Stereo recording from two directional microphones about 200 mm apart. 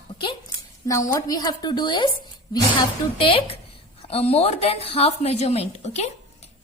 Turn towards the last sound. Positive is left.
turn(degrees=35)  # may be behind; listen again after turning